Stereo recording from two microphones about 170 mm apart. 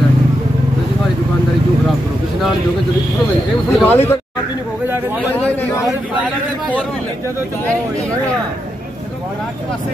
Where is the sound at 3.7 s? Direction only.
10° left (ahead or behind).